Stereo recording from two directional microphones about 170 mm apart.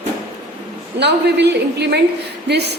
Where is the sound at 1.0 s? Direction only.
80° right.